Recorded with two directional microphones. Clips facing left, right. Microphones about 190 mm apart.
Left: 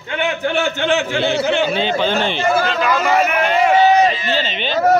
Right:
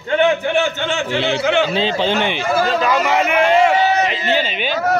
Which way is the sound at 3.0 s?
20° right (ahead or behind).